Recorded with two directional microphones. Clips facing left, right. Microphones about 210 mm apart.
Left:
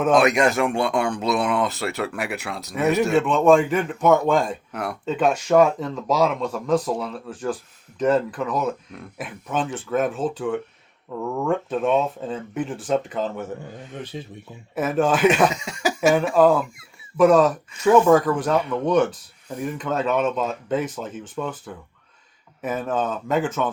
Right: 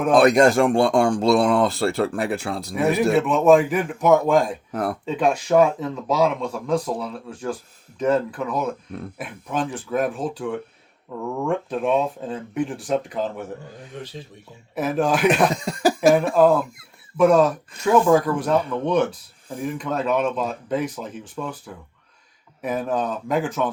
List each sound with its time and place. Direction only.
0.1 s speech: 35° right (ahead or behind)
3.2 s speech: centre (ahead or behind)
4.7 s speech: 30° right (ahead or behind)
5.0 s speech: centre (ahead or behind)
14.8 s speech: centre (ahead or behind)
15.4 s speech: 35° right (ahead or behind)
16.3 s speech: centre (ahead or behind)